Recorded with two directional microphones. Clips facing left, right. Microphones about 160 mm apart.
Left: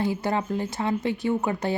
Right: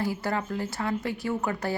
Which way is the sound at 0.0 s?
20° left (ahead or behind).